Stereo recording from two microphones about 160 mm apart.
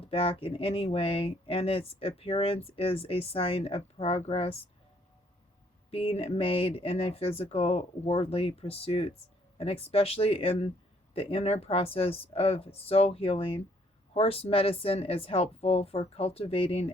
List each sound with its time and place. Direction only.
0.0 s speech: 35° left (ahead or behind)
5.9 s speech: 35° left (ahead or behind)